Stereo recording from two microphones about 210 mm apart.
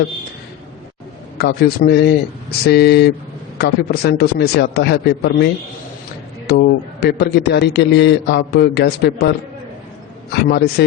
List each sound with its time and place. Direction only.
1.4 s a man's voice: 50° left (ahead or behind)
6.5 s a man's voice: 50° left (ahead or behind)
10.3 s a man's voice: 50° left (ahead or behind)